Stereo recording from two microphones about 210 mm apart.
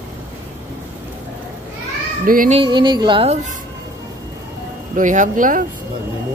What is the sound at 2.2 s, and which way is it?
Speech, 40° right (ahead or behind).